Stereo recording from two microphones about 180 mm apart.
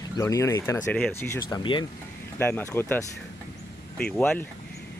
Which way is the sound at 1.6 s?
25° left (ahead or behind).